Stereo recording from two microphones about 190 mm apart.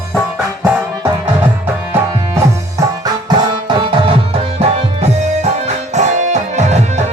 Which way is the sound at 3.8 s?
25° right (ahead or behind).